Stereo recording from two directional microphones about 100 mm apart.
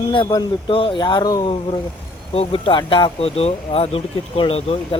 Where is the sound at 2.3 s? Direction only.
70° left (ahead or behind).